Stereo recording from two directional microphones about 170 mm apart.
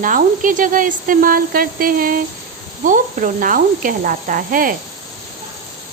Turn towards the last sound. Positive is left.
turn(degrees=-55)  # may be behind; listen again after turning